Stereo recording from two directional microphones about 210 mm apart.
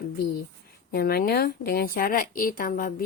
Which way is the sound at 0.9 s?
45° left (ahead or behind).